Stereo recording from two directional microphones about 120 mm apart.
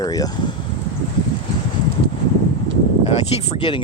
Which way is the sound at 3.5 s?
40° left (ahead or behind).